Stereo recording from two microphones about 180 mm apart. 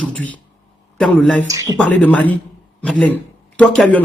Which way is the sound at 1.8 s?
10° left (ahead or behind).